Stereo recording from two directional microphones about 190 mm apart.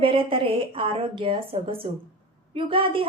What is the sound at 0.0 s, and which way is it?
A woman's voice, 30° right (ahead or behind).